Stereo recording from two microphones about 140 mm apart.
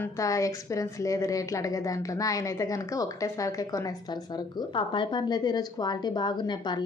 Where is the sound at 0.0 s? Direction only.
25° left (ahead or behind).